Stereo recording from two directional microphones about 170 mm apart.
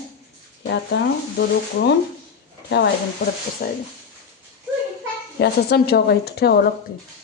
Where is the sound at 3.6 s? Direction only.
60° left (ahead or behind).